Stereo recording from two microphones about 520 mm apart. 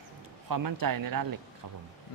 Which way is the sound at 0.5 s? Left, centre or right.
Right.